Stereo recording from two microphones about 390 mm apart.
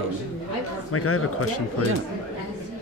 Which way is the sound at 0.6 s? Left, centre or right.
Left.